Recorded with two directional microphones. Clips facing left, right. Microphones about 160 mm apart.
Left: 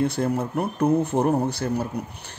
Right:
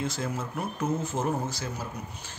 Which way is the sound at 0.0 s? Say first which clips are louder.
Left 9 dB; 60° left (ahead or behind).